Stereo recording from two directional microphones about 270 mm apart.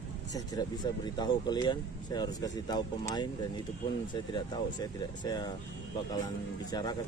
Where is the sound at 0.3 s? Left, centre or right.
Centre.